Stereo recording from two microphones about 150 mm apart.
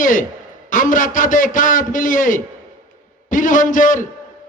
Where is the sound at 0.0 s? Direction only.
60° left (ahead or behind).